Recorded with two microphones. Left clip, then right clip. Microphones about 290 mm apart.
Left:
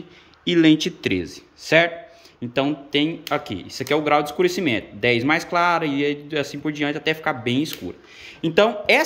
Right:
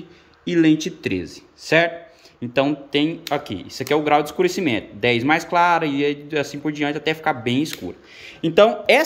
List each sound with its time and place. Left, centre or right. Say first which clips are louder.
0.5 s speech: left 1 dB; centre